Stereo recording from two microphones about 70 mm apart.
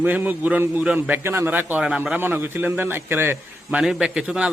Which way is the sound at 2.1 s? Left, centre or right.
Right.